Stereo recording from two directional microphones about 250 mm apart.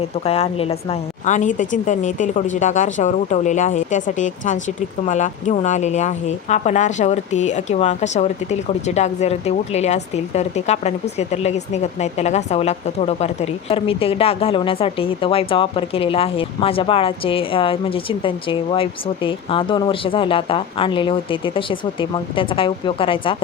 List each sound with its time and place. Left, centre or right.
0.3 s a woman's voice: left